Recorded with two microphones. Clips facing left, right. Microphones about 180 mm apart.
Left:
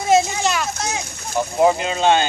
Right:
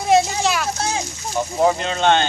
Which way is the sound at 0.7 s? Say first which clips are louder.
Right 2 dB; 30° right (ahead or behind).